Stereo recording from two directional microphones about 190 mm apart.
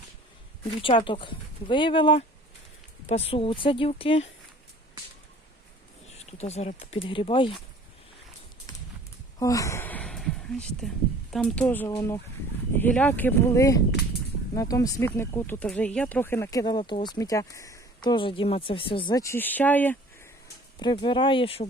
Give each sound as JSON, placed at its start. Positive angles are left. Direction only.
{"t": 0.8, "sound": "speech", "side_deg": 25}
{"t": 6.3, "sound": "speech", "side_deg": 35}
{"t": 9.4, "sound": "speech", "side_deg": 15}
{"t": 20.7, "sound": "speech", "side_deg": 25}